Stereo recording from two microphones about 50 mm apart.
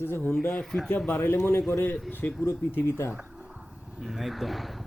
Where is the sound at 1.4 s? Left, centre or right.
Left.